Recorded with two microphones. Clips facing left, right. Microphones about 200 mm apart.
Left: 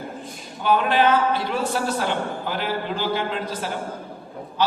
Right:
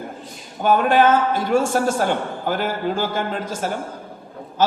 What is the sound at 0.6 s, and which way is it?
A man's voice, 45° right (ahead or behind).